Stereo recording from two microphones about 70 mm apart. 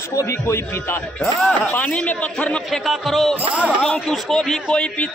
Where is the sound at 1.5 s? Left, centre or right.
Left.